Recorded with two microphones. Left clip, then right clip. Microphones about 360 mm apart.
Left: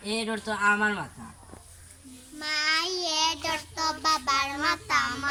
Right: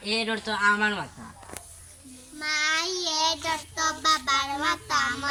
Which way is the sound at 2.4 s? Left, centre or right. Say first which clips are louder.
Right 1 dB; centre.